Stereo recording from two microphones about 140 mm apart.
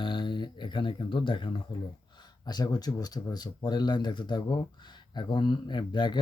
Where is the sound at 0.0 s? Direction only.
35° left (ahead or behind).